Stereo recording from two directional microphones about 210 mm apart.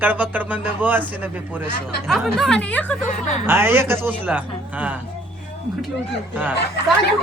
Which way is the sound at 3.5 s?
10° right (ahead or behind).